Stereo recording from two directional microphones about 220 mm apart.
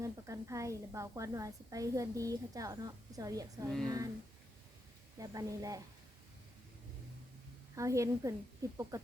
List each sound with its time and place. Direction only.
0.0 s a woman's voice: 15° right (ahead or behind)
5.2 s a woman's voice: 15° right (ahead or behind)
7.8 s a woman's voice: 15° right (ahead or behind)